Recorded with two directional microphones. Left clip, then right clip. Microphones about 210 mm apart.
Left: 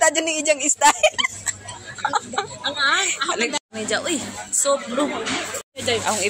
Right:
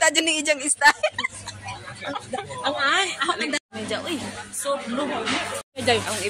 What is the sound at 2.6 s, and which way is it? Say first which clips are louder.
Speech: left 1 dB; 30° right (ahead or behind).